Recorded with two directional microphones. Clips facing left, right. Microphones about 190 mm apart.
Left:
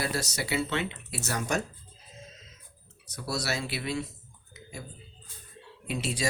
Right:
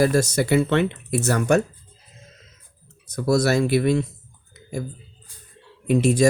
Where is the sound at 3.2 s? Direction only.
50° right (ahead or behind).